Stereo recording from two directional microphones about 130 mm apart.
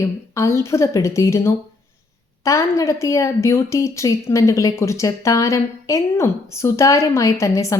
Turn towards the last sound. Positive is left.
turn(degrees=25)  # may be behind; listen again after turning